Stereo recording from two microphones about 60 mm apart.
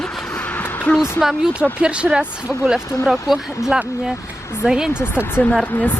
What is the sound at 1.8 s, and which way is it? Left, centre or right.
Speech, centre.